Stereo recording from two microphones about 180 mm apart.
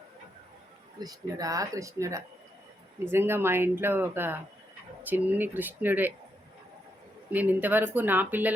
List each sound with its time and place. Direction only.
0.9 s speech: 20° right (ahead or behind)
7.3 s speech: 10° right (ahead or behind)